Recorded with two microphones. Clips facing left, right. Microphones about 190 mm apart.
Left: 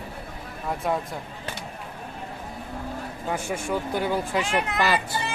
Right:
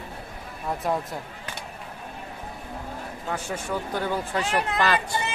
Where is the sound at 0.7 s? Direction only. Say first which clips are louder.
Even; centre (ahead or behind).